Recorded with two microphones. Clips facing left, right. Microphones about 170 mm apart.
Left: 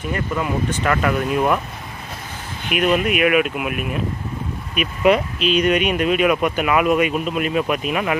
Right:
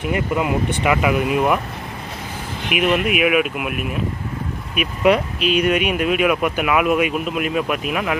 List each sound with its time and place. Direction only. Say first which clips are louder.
0.0 s speech: right 3 dB; 20° right (ahead or behind)
2.7 s speech: even; 5° right (ahead or behind)